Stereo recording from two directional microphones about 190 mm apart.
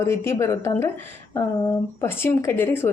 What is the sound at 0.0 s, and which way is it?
Speech, 15° left (ahead or behind).